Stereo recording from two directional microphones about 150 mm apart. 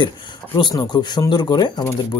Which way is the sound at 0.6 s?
30° left (ahead or behind).